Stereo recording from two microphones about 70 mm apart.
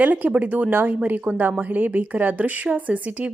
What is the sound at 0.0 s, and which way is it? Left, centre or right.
A woman's voice, right.